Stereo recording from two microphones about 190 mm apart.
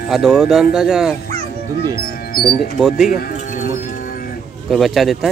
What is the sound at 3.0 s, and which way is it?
Speech, 50° left (ahead or behind).